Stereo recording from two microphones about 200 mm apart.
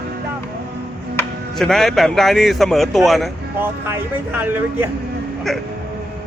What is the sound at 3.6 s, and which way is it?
Speech, 10° right (ahead or behind).